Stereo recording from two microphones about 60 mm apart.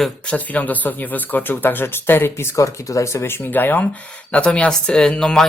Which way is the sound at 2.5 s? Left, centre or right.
Left.